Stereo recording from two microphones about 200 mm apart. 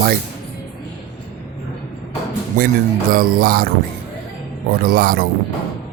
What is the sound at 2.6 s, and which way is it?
A man's voice, 40° right (ahead or behind).